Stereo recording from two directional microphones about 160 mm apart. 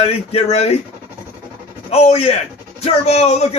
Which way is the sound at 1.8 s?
40° left (ahead or behind).